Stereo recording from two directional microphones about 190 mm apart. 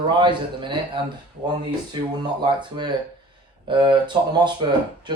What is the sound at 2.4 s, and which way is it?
Speech, 25° right (ahead or behind).